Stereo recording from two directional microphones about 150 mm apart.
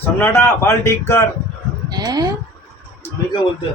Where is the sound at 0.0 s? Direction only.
15° left (ahead or behind).